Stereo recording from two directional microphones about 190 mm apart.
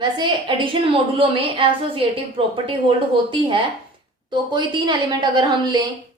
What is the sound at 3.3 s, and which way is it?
A woman's voice, 25° right (ahead or behind).